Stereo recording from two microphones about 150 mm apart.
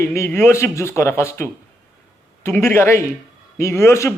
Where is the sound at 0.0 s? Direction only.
20° left (ahead or behind).